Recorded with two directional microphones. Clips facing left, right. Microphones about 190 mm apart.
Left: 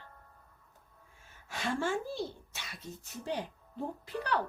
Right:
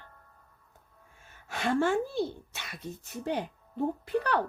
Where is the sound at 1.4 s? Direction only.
60° right (ahead or behind).